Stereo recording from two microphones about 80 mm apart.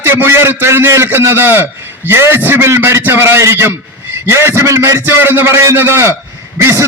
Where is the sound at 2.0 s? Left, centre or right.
Right.